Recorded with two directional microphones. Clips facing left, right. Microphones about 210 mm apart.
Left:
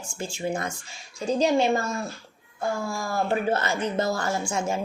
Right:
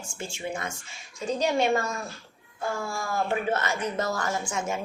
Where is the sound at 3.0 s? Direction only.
35° left (ahead or behind).